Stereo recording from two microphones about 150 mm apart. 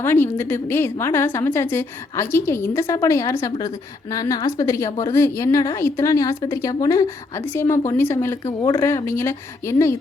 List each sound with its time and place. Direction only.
0.0 s a woman's voice: 15° left (ahead or behind)